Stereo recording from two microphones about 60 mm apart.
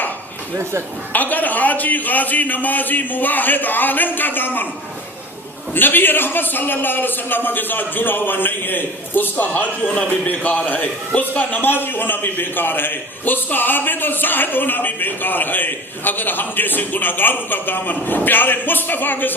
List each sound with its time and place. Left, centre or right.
0.5 s speech: right
1.1 s a man's voice: left
5.7 s a man's voice: left